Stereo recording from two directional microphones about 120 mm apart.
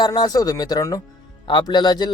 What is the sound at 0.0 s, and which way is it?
A man's voice, 35° left (ahead or behind).